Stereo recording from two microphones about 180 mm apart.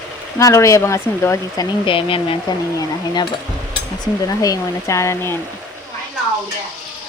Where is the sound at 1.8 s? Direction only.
30° left (ahead or behind).